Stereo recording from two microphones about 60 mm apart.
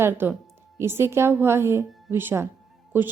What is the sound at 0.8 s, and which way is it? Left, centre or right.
A woman's voice, right.